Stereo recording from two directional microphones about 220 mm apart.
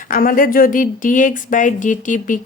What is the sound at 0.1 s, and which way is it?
Speech, 40° left (ahead or behind).